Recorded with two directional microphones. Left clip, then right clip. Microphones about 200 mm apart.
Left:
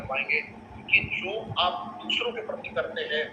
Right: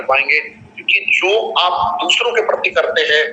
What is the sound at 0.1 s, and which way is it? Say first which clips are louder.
Speech: right 14 dB; 45° right (ahead or behind).